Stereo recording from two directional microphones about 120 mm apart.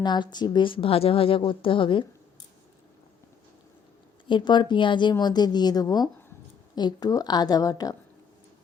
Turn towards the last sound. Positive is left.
turn(degrees=30)  # may be behind; listen again after turning